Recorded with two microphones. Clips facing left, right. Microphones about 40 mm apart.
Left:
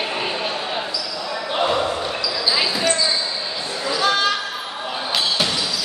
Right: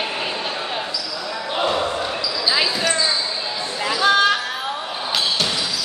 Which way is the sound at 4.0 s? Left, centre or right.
Centre.